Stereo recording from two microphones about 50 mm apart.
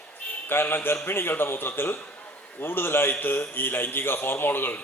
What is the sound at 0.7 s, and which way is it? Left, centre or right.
A man's voice, left.